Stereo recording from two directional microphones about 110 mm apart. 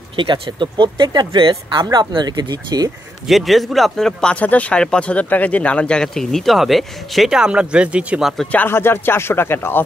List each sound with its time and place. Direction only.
0.1 s speech: 50° right (ahead or behind)
3.3 s speech: centre (ahead or behind)
8.5 s speech: 20° left (ahead or behind)